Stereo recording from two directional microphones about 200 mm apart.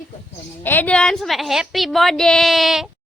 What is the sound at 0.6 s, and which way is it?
A woman's voice, 10° left (ahead or behind).